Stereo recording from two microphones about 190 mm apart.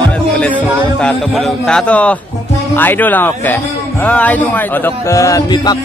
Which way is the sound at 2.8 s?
10° left (ahead or behind).